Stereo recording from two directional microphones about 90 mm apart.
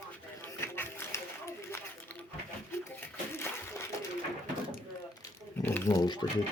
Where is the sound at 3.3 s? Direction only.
30° left (ahead or behind).